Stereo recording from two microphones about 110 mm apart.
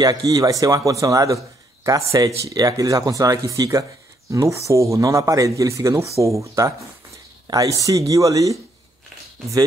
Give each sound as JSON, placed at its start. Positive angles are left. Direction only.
{"t": 0.0, "sound": "speech", "side_deg": -35}